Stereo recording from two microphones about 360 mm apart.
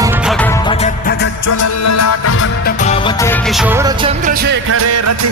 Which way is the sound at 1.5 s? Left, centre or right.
Left.